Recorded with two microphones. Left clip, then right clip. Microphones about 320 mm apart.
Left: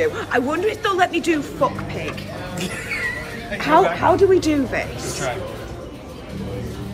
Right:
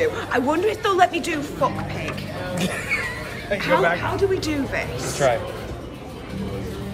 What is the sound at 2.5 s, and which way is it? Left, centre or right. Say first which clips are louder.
Mouse: right 2 dB; centre.